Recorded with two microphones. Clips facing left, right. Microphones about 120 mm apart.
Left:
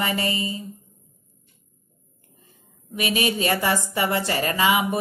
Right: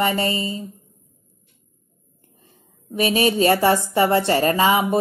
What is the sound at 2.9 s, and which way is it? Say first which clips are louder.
A woman's voice: right 6 dB; 30° right (ahead or behind).